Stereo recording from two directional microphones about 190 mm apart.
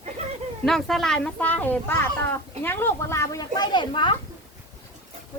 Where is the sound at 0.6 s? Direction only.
Centre (ahead or behind); by 4.1 s 25° left (ahead or behind).